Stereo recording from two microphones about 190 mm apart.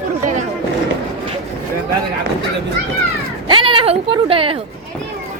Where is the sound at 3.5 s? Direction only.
25° right (ahead or behind).